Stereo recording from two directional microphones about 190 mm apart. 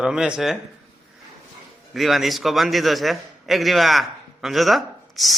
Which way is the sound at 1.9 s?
Centre (ahead or behind).